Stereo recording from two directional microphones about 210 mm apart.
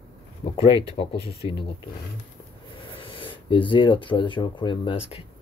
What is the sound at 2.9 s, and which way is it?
Speech, 25° left (ahead or behind).